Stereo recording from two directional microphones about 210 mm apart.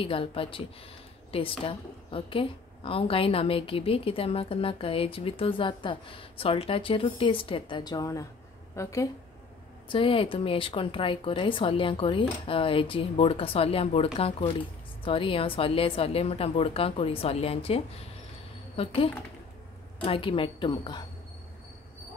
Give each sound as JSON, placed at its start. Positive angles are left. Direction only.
{"t": 0.0, "sound": "a woman's voice", "side_deg": 25}
{"t": 20.0, "sound": "speech", "side_deg": 25}